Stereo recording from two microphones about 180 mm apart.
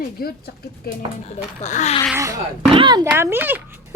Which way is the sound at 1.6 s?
40° left (ahead or behind).